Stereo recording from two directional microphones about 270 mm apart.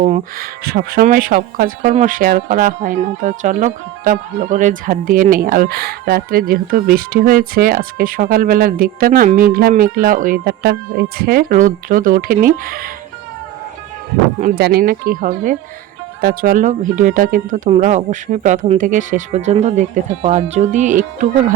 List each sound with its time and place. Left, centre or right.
0.0 s speech: right
14.4 s speech: right